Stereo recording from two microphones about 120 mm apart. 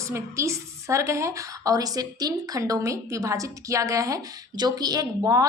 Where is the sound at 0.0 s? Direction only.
25° right (ahead or behind).